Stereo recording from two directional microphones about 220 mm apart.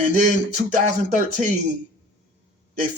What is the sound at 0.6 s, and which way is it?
Speech, 35° right (ahead or behind).